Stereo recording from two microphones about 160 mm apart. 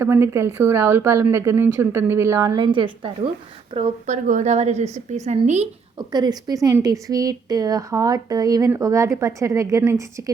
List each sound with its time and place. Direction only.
0.0 s a woman's voice: 15° right (ahead or behind); by 3.2 s 30° right (ahead or behind)
3.8 s a woman's voice: 50° right (ahead or behind)
6.0 s a woman's voice: 25° right (ahead or behind)